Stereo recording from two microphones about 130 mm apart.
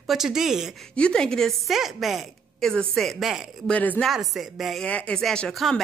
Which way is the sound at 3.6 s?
10° left (ahead or behind).